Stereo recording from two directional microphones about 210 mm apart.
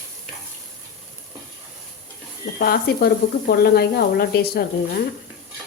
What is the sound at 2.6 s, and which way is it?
Speech, 45° left (ahead or behind).